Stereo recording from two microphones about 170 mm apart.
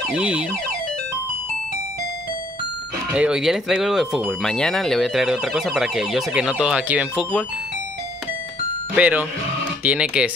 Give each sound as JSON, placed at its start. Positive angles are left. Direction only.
{"t": 0.1, "sound": "speech", "side_deg": -5}
{"t": 3.1, "sound": "speech", "side_deg": -5}
{"t": 8.9, "sound": "speech", "side_deg": -10}